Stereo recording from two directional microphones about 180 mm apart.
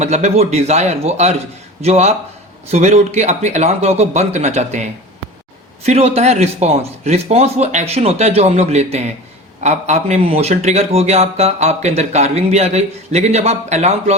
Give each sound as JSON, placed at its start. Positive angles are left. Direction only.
{"t": 0.0, "sound": "a man's voice", "side_deg": -35}